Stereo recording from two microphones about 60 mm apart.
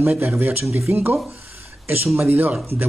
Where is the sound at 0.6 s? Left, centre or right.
Right.